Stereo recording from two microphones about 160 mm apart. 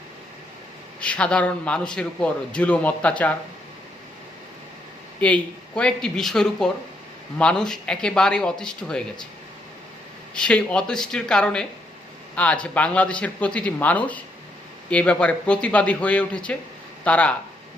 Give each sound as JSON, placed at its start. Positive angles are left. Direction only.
{"t": 1.0, "sound": "a man's voice", "side_deg": 5}
{"t": 5.2, "sound": "speech", "side_deg": 5}
{"t": 10.3, "sound": "a man's voice", "side_deg": 5}